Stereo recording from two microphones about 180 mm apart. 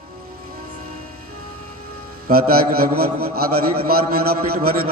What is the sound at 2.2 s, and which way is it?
A man's voice, 55° right (ahead or behind).